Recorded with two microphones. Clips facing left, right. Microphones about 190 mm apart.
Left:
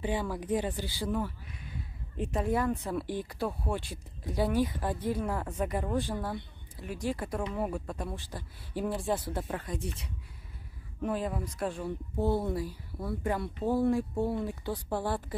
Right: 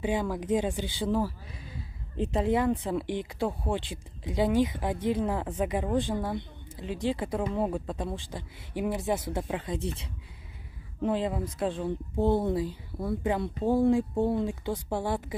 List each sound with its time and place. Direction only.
0.0 s speech: 10° right (ahead or behind)
2.5 s speech: 15° right (ahead or behind)
9.8 s speech: 30° right (ahead or behind)